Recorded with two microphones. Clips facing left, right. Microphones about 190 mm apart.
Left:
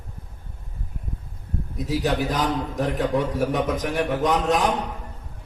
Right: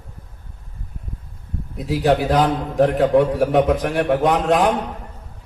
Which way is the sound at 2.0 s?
70° right (ahead or behind).